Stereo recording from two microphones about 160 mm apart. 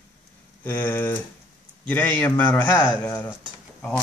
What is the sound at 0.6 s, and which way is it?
Speech, 15° left (ahead or behind).